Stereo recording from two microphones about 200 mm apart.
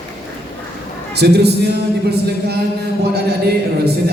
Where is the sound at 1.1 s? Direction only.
55° right (ahead or behind).